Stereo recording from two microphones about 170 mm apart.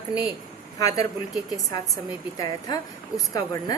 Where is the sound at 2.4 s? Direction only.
25° left (ahead or behind).